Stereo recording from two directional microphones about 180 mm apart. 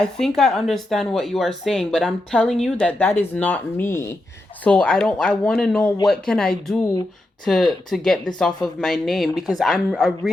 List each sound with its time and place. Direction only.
0.0 s speech: centre (ahead or behind)